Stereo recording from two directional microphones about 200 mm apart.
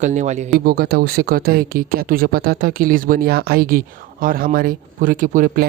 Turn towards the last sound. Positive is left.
turn(degrees=-45)  # may be behind; listen again after turning